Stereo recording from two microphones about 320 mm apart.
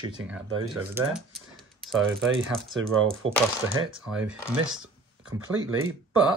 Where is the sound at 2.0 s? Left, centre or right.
Right.